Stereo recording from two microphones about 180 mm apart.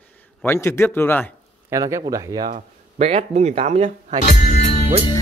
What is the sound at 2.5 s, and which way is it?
Speech, 35° right (ahead or behind).